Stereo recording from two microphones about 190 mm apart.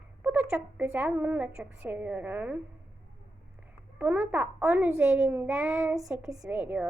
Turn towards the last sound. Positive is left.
turn(degrees=-5)  # may be behind; listen again after turning